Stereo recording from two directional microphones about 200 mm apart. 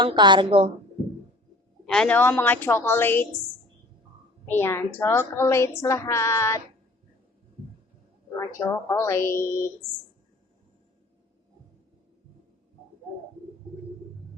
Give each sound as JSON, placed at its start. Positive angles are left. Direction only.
{"t": 0.0, "sound": "a woman's voice", "side_deg": -20}
{"t": 1.9, "sound": "a woman's voice", "side_deg": 5}
{"t": 4.4, "sound": "a woman's voice", "side_deg": 10}
{"t": 8.4, "sound": "a woman's voice", "side_deg": 15}